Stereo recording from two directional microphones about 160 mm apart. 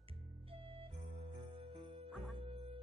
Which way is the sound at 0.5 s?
35° right (ahead or behind).